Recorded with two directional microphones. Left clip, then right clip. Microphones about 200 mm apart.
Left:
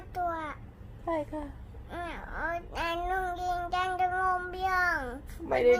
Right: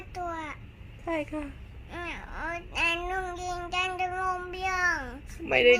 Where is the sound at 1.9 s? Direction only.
5° left (ahead or behind).